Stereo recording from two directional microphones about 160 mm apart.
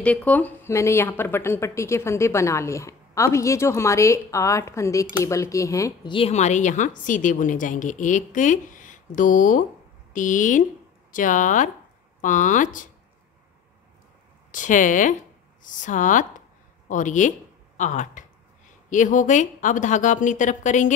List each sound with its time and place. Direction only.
0.0 s speech: 10° left (ahead or behind)
6.1 s a woman's voice: 40° left (ahead or behind)
14.5 s a woman's voice: 55° left (ahead or behind)